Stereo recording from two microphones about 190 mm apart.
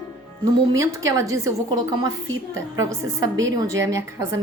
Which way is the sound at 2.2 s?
90° right.